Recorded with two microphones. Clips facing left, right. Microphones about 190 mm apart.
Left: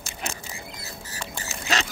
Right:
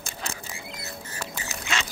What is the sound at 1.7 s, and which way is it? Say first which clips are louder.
Duck: left 4 dB; 35° left (ahead or behind).